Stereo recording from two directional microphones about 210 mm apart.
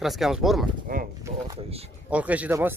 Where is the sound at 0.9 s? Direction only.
45° right (ahead or behind).